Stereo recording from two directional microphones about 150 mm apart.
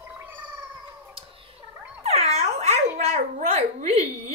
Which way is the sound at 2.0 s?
45° right (ahead or behind).